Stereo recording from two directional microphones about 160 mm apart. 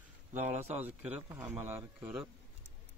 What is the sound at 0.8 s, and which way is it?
Speech, 10° right (ahead or behind).